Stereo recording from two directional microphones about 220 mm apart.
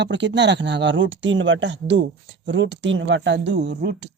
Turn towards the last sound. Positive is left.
turn(degrees=-50)  # may be behind; listen again after turning